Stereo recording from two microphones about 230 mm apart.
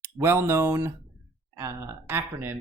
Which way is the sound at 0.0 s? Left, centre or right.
Centre.